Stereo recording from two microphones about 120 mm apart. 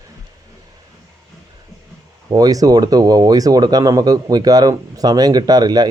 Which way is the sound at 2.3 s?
30° right (ahead or behind).